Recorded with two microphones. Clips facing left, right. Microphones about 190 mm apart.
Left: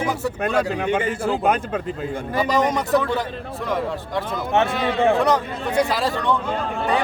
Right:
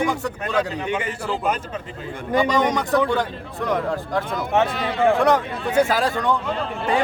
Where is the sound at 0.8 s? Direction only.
50° left (ahead or behind).